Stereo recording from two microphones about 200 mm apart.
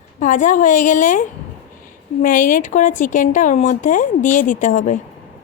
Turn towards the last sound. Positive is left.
turn(degrees=40)  # may be behind; listen again after turning